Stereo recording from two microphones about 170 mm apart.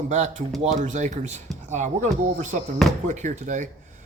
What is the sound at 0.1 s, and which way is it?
Speech, 45° right (ahead or behind).